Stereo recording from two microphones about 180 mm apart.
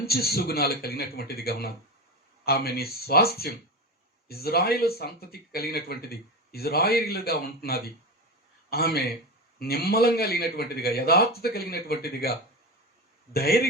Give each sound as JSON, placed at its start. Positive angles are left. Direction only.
{"t": 0.1, "sound": "speech", "side_deg": 60}
{"t": 13.3, "sound": "speech", "side_deg": 60}